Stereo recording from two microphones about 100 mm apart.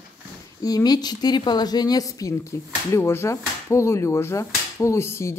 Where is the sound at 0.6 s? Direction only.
40° left (ahead or behind).